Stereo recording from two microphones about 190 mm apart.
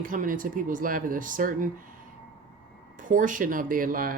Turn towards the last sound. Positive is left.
turn(degrees=-45)  # may be behind; listen again after turning